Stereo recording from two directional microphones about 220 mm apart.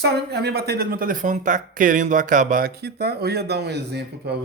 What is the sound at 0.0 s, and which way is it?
Speech, 50° right (ahead or behind).